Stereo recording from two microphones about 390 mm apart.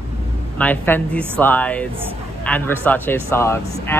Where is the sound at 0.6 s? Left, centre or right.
Centre.